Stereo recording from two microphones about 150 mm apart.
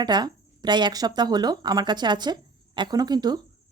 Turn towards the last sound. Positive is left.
turn(degrees=-30)  # may be behind; listen again after turning